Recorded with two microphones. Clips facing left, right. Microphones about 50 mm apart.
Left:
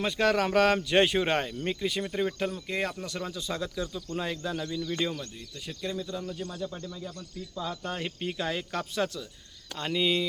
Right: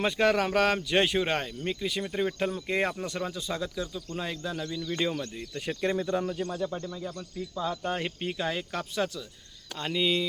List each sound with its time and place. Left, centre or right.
0.0 s speech: centre
2.6 s speech: centre
4.9 s speech: centre
5.4 s speech: right
6.5 s speech: right
6.8 s speech: centre